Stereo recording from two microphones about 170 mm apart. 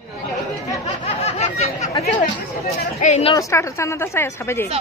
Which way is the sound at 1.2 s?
40° left (ahead or behind).